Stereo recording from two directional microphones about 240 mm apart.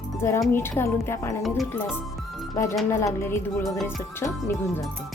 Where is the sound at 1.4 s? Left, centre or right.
Centre.